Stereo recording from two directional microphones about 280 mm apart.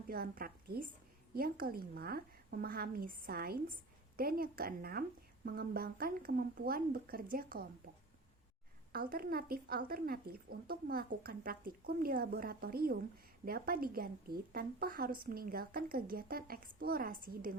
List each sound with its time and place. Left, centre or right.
0.1 s a woman's voice: right
8.9 s a woman's voice: right